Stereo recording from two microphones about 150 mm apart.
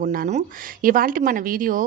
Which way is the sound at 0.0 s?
70° right (ahead or behind).